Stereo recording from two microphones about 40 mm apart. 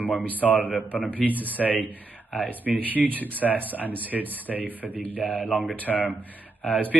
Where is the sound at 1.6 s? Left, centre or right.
Right.